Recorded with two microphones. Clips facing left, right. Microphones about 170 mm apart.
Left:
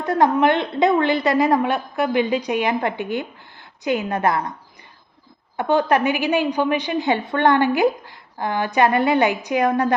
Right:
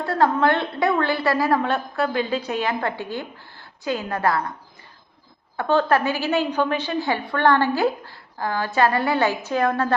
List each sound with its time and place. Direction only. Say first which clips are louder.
0.0 s a woman's voice: left 2 dB; 20° left (ahead or behind)
5.5 s a woman's voice: left 1 dB; 15° left (ahead or behind)